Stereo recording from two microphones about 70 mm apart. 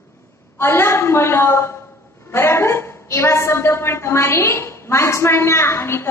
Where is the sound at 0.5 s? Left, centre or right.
Left.